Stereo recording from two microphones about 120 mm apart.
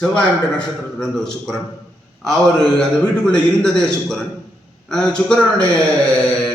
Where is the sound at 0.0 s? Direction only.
10° left (ahead or behind).